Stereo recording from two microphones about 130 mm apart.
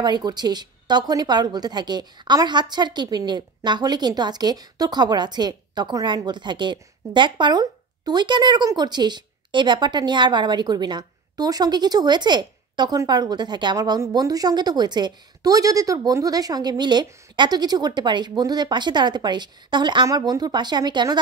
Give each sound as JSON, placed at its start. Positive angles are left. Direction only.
{"t": 0.0, "sound": "speech", "side_deg": -35}